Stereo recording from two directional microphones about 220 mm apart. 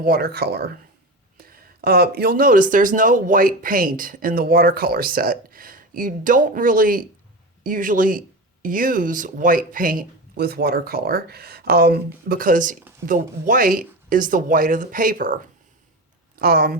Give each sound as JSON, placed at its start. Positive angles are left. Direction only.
{"t": 0.0, "sound": "speech", "side_deg": -45}